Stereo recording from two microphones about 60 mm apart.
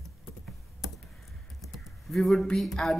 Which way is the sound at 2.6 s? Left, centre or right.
Centre.